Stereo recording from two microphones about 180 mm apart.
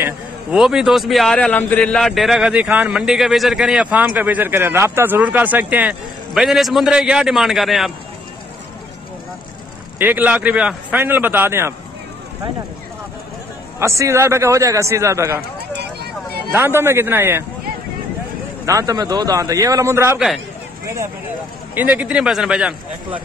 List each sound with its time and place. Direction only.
0.0 s a man's voice: 5° right (ahead or behind)
9.9 s a man's voice: 10° right (ahead or behind)
13.7 s a man's voice: 15° right (ahead or behind)
15.8 s vehicle: 60° right (ahead or behind)
16.5 s a man's voice: 15° right (ahead or behind)
18.7 s a man's voice: 20° right (ahead or behind)